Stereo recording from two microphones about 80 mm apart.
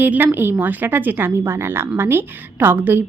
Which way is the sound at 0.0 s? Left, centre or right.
Right.